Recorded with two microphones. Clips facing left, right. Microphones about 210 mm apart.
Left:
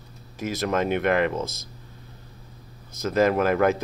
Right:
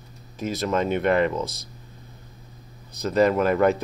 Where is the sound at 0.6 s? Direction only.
55° left (ahead or behind).